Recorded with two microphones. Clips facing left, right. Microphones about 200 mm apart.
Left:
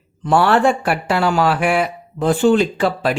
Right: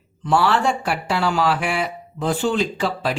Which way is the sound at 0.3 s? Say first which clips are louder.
Left 4 dB; 55° left (ahead or behind).